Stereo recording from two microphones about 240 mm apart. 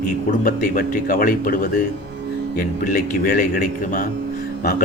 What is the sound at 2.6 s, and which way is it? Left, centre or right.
Speech, left.